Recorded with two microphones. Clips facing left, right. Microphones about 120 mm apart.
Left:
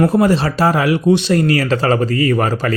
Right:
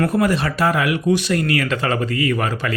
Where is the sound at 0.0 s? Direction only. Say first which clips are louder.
Left 5 dB; 30° left (ahead or behind).